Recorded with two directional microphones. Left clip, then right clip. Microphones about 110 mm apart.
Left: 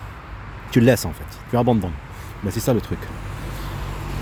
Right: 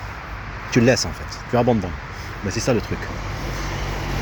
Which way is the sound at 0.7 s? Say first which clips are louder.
Even; 85° left.